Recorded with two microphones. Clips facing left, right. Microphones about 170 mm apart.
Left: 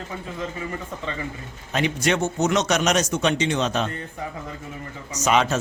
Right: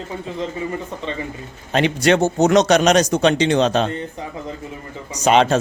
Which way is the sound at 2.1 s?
35° right (ahead or behind).